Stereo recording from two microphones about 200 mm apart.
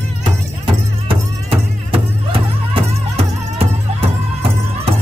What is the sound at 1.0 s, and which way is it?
Music, 30° right (ahead or behind).